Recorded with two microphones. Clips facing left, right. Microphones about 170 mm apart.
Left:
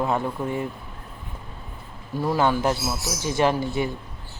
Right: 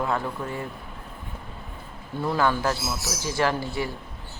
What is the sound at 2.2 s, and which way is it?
Speech, 20° left (ahead or behind).